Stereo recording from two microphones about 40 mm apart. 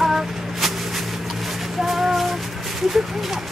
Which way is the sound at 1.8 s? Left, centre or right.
Centre.